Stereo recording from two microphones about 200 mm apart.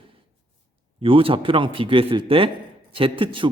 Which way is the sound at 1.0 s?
25° right (ahead or behind).